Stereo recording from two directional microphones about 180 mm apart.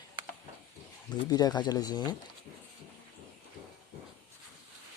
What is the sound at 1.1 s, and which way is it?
Speech, 20° left (ahead or behind).